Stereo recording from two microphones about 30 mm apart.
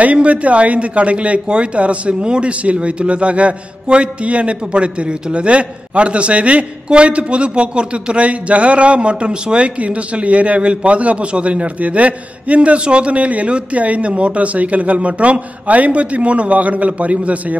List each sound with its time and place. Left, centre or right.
0.0 s a man's voice: right
9.8 s a man's voice: right
14.1 s a man's voice: right